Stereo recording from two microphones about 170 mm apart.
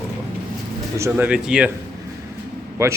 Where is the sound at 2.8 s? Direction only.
15° right (ahead or behind).